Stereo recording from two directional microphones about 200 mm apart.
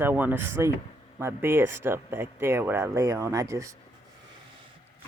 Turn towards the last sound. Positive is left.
turn(degrees=-15)  # may be behind; listen again after turning